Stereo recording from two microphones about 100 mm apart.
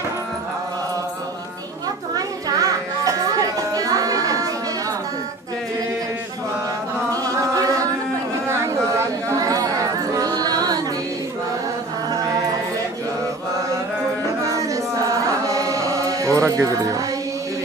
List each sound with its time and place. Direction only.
2.1 s music: 35° right (ahead or behind)
7.1 s chant: 35° right (ahead or behind)
8.5 s chatter: 30° right (ahead or behind)
14.5 s chant: 35° right (ahead or behind)